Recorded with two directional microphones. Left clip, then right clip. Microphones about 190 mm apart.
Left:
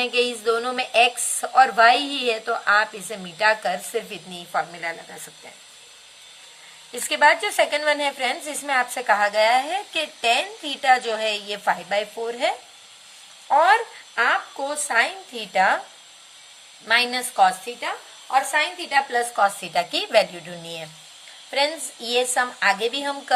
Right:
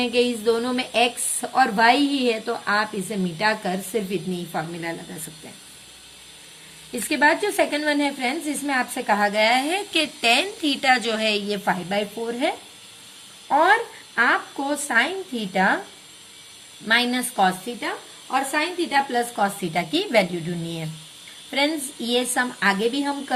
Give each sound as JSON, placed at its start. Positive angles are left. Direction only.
{"t": 0.0, "sound": "a woman's voice", "side_deg": 20}
{"t": 7.1, "sound": "a woman's voice", "side_deg": 15}
{"t": 16.9, "sound": "a woman's voice", "side_deg": 15}